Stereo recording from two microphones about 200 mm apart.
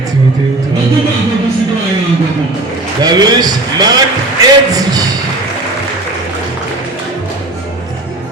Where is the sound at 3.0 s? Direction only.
20° right (ahead or behind).